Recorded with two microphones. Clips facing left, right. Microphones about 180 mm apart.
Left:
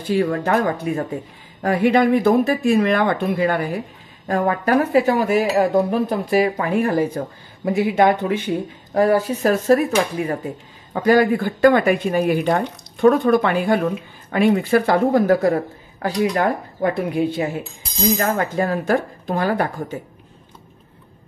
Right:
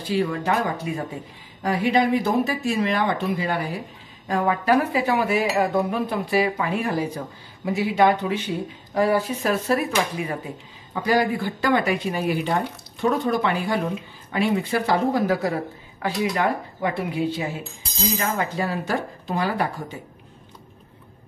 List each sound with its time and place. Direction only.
0.0 s speech: 55° left (ahead or behind)